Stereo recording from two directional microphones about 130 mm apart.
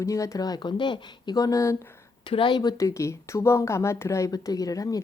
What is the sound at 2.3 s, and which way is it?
A woman's voice, 40° left (ahead or behind).